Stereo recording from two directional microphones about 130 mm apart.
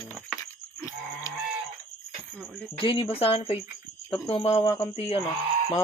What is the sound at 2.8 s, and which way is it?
Speech, 40° left (ahead or behind).